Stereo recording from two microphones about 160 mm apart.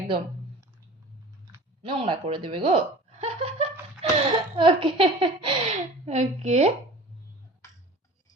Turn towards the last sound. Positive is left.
turn(degrees=20)  # may be behind; listen again after turning